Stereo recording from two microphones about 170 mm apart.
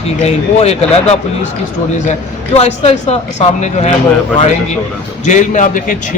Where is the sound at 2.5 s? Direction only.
40° left (ahead or behind).